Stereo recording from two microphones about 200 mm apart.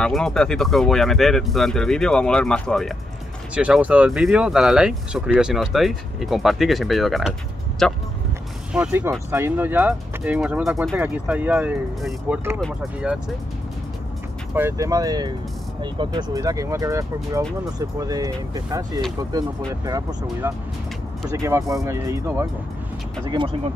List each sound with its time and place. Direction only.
0.0 s speech: centre (ahead or behind)
8.7 s speech: 10° right (ahead or behind)
14.5 s speech: 10° right (ahead or behind)
23.3 s speech: 25° right (ahead or behind)